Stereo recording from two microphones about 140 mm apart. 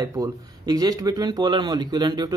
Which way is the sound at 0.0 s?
25° right (ahead or behind).